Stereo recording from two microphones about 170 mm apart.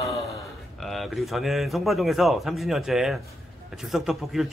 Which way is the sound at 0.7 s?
Centre (ahead or behind).